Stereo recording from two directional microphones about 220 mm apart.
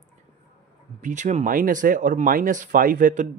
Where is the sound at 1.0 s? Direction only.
35° right (ahead or behind).